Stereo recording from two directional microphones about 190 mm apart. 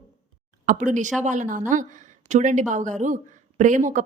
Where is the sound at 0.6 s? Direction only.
45° right (ahead or behind).